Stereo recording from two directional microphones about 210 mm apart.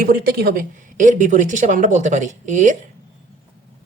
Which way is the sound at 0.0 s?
50° right (ahead or behind).